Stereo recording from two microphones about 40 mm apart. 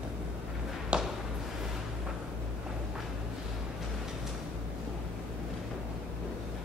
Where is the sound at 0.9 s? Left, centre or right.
Right.